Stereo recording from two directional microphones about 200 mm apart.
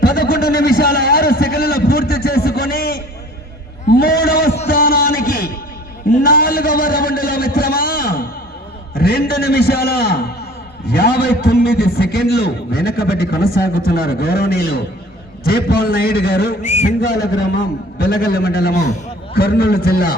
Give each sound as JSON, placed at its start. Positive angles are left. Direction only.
{"t": 0.2, "sound": "a sound", "side_deg": 50}
{"t": 9.0, "sound": "a man's voice", "side_deg": 50}
{"t": 16.6, "sound": "a man's voice", "side_deg": 35}
{"t": 18.0, "sound": "a man's voice", "side_deg": 50}